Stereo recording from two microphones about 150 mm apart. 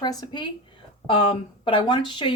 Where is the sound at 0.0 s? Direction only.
25° left (ahead or behind).